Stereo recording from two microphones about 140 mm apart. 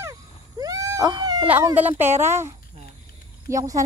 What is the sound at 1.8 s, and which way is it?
Speech, 15° right (ahead or behind).